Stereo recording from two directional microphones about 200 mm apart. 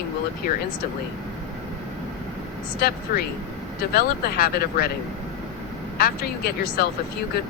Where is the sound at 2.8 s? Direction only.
50° left (ahead or behind).